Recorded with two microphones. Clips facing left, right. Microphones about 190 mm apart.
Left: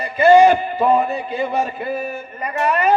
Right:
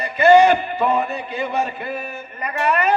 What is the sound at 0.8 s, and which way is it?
Speech, 30° left (ahead or behind).